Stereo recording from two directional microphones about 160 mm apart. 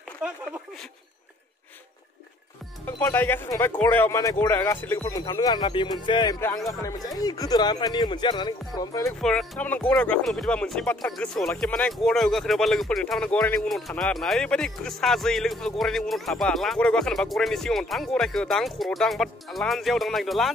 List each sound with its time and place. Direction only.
0.2 s speech: 5° right (ahead or behind)
2.8 s speech: 15° left (ahead or behind)
9.2 s speech: 5° left (ahead or behind)